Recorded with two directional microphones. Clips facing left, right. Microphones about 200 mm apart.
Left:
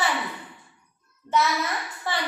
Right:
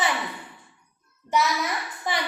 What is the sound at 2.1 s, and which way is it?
Speech, 15° right (ahead or behind).